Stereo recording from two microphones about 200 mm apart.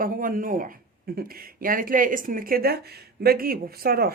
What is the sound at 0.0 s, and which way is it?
Speech, 45° right (ahead or behind).